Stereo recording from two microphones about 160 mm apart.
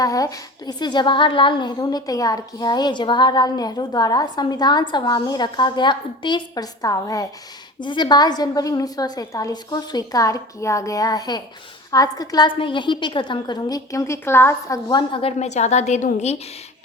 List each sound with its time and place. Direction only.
0.0 s a woman's voice: 20° left (ahead or behind); by 16.4 s 45° left (ahead or behind)